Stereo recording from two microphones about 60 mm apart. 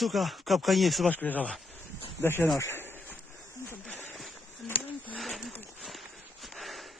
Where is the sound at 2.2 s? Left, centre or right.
Left.